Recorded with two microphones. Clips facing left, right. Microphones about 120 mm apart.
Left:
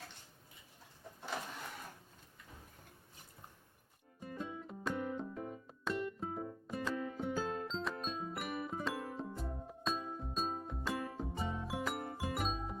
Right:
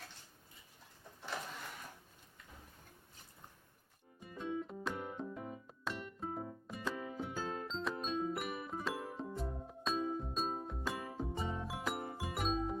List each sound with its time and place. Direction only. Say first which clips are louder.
4.2 s music: right 3 dB; centre (ahead or behind)